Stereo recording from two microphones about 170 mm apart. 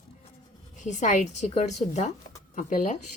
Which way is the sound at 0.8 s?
45° left (ahead or behind).